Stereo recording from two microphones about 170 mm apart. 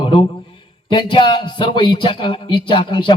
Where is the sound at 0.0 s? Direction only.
30° left (ahead or behind).